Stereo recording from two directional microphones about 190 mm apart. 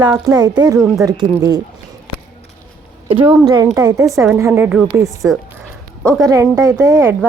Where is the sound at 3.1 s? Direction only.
25° right (ahead or behind); by 5.0 s 10° right (ahead or behind).